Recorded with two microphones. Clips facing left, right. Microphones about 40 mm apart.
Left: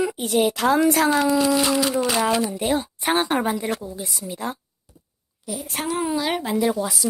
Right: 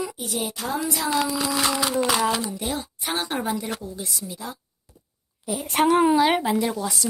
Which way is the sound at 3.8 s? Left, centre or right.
Centre.